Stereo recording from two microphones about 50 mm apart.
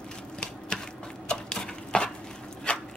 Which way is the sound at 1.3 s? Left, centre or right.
Centre.